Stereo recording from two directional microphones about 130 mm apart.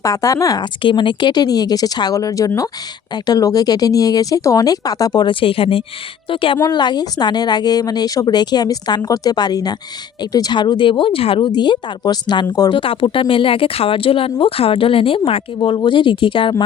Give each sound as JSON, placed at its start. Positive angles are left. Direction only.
{"t": 0.0, "sound": "a woman's voice", "side_deg": 25}